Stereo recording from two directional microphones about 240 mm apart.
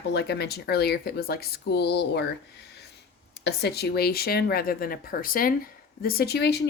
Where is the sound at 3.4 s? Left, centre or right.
Left.